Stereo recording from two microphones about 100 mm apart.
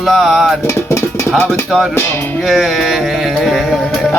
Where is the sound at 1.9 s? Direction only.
20° left (ahead or behind).